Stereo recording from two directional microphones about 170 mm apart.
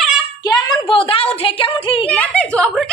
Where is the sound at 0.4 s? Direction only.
25° left (ahead or behind).